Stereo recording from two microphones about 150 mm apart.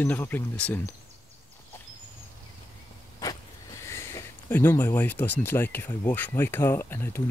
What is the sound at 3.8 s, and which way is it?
Speech, 20° left (ahead or behind).